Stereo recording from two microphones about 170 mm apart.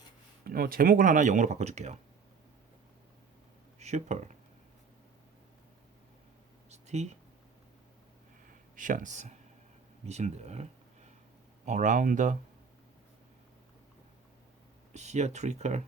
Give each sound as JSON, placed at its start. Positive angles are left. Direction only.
{"t": 0.4, "sound": "speech", "side_deg": -60}
{"t": 3.8, "sound": "speech", "side_deg": -40}
{"t": 6.7, "sound": "a sound", "side_deg": -40}
{"t": 8.4, "sound": "a sound", "side_deg": -50}
{"t": 10.1, "sound": "speech", "side_deg": -40}
{"t": 14.9, "sound": "speech", "side_deg": -40}